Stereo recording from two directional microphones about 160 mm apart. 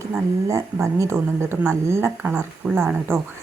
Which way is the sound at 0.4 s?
20° right (ahead or behind).